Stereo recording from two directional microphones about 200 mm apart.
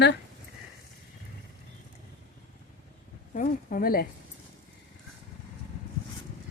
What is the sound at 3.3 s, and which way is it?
Speech, 45° left (ahead or behind).